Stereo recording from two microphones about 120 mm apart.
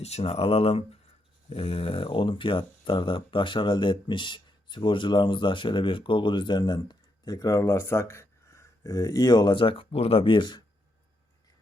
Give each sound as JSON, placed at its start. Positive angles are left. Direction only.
{"t": 0.0, "sound": "speech", "side_deg": 60}